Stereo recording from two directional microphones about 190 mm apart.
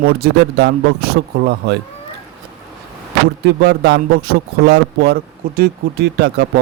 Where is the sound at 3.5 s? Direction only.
60° right (ahead or behind).